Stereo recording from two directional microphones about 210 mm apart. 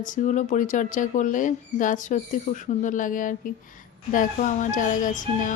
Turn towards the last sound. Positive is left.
turn(degrees=40)  # may be behind; listen again after turning